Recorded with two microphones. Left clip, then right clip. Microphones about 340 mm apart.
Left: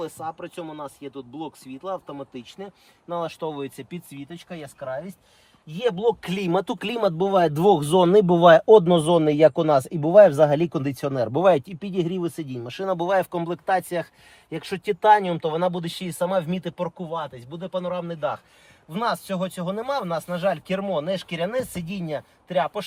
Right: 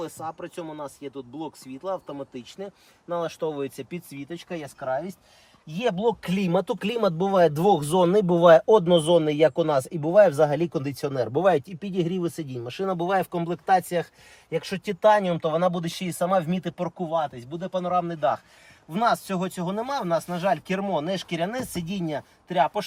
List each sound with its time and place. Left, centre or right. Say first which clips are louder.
0.0 s speech: left 2 dB; centre
5.8 s speech: left 2 dB; centre
7.9 s speech: left 4 dB; left
11.7 s speech: left 1 dB; centre